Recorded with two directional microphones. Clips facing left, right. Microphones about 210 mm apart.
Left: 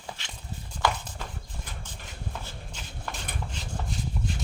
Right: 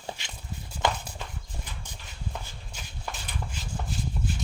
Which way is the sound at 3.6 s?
5° right (ahead or behind).